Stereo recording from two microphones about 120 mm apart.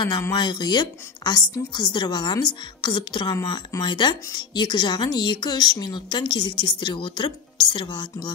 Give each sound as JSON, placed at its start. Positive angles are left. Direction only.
{"t": 0.2, "sound": "a woman's voice", "side_deg": 35}